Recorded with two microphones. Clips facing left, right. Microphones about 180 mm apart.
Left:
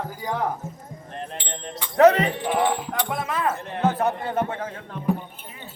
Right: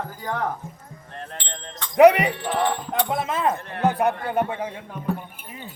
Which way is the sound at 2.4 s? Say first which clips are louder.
Left 1 dB; 15° left (ahead or behind).